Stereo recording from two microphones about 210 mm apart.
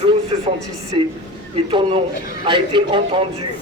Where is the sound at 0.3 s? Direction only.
25° right (ahead or behind).